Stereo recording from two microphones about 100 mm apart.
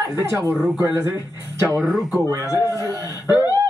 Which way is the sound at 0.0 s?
30° right (ahead or behind).